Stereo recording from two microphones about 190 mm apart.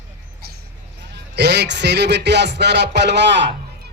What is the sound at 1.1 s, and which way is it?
A man's voice, 60° right (ahead or behind).